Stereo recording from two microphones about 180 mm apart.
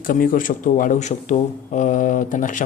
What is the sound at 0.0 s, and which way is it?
Speech, 50° left (ahead or behind).